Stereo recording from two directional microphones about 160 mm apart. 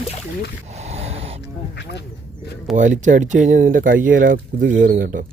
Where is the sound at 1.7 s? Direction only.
90° left.